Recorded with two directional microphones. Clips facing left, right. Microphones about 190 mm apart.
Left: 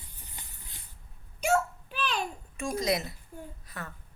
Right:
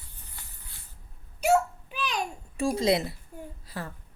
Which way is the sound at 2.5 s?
30° right (ahead or behind).